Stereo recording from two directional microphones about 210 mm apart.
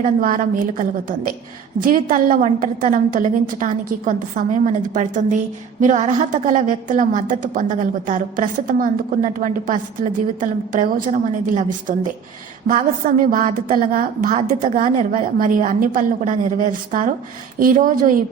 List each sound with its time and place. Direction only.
0.0 s a woman's voice: 40° right (ahead or behind)